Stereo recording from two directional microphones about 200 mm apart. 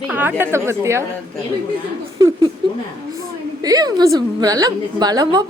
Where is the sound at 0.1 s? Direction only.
10° right (ahead or behind).